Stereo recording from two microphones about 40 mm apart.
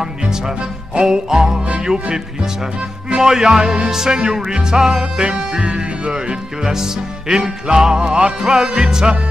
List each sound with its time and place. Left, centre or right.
0.9 s music: centre
3.2 s music: centre